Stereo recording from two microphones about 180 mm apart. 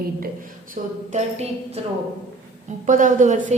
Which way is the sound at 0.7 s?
40° right (ahead or behind).